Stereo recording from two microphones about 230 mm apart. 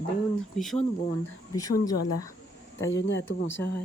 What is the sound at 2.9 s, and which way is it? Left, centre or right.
Speech, left.